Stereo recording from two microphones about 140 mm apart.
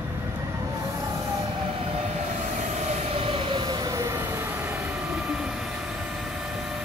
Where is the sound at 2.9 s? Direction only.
45° right (ahead or behind); by 4.9 s 15° right (ahead or behind).